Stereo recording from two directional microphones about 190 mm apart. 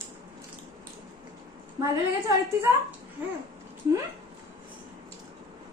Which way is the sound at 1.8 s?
15° right (ahead or behind).